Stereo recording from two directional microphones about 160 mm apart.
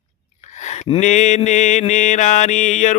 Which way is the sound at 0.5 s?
45° left (ahead or behind).